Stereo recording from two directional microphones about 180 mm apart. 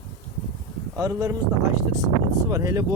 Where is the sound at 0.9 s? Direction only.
15° right (ahead or behind).